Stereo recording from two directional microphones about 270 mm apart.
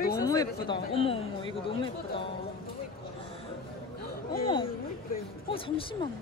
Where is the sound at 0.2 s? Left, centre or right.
Centre.